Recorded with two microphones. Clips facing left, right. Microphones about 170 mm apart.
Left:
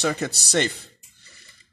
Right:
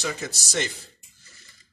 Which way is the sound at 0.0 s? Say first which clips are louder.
Left 6 dB; 60° left (ahead or behind).